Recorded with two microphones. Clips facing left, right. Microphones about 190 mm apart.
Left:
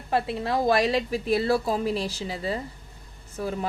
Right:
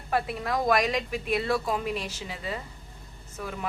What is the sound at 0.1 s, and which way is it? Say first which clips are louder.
A woman's voice: left 3 dB; 25° left (ahead or behind).